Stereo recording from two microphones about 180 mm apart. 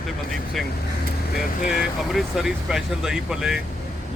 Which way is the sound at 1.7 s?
Centre (ahead or behind).